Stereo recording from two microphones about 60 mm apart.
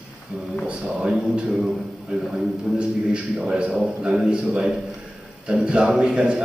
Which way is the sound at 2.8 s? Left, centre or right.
Centre.